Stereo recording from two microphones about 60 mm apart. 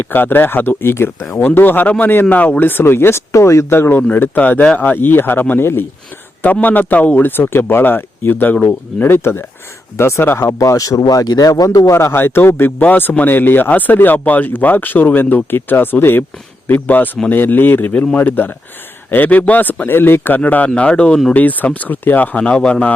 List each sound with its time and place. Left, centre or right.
0.1 s speech: left
4.4 s speech: left
6.4 s speech: left
10.4 s speech: left
11.9 s speech: left
17.9 s speech: left
18.2 s speech: left
20.7 s a man's voice: centre
21.3 s speech: left
22.4 s a man's voice: centre